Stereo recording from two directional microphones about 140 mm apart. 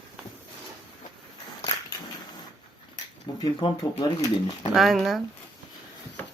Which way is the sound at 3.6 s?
35° left (ahead or behind).